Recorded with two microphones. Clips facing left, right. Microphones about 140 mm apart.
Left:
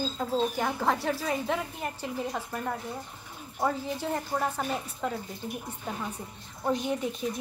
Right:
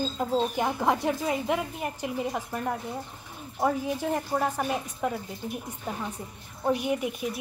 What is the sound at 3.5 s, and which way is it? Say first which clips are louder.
A woman's voice: right 3 dB; 15° right (ahead or behind).